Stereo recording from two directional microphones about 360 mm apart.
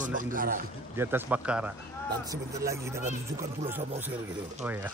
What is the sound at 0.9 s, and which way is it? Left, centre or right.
A man's voice, centre.